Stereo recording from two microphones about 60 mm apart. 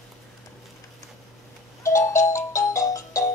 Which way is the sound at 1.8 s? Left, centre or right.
Left.